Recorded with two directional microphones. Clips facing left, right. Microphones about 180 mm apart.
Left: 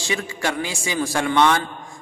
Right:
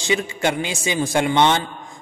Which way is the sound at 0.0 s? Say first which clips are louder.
Right 4 dB; 20° right (ahead or behind).